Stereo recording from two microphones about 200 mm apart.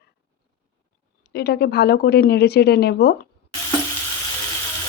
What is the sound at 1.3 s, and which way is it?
A woman's voice, 55° left (ahead or behind).